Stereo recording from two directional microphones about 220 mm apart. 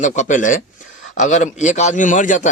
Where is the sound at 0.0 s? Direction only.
35° left (ahead or behind).